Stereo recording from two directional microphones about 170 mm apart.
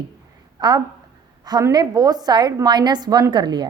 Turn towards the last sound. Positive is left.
turn(degrees=-25)  # may be behind; listen again after turning